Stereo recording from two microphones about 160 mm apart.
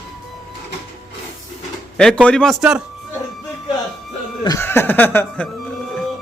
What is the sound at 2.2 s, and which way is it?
Speech, 5° left (ahead or behind).